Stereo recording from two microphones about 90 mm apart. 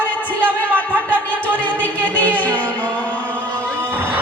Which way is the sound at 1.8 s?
20° left (ahead or behind).